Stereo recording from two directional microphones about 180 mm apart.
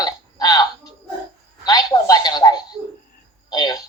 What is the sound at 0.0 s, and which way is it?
Burping, 20° left (ahead or behind).